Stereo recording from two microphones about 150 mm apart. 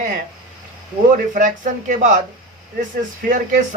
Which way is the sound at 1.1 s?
60° right (ahead or behind).